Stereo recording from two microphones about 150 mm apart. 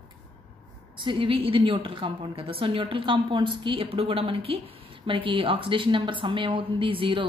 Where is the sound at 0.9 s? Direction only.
35° right (ahead or behind).